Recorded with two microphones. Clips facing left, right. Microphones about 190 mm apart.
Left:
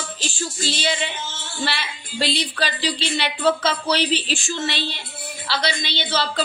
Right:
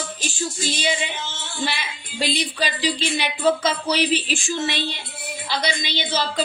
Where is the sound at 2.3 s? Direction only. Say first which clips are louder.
Even; 10° right (ahead or behind).